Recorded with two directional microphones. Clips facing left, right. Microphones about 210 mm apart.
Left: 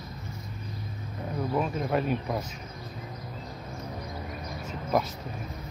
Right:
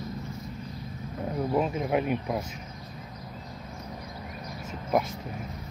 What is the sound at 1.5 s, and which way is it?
Speech, 15° right (ahead or behind).